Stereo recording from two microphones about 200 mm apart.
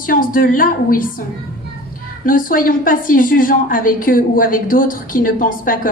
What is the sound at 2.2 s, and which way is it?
A woman's voice, 45° left (ahead or behind).